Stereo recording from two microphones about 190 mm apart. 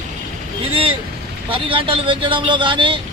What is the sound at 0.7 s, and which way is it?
Vehicle, 30° right (ahead or behind).